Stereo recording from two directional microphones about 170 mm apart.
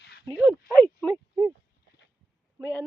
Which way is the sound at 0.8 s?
10° left (ahead or behind).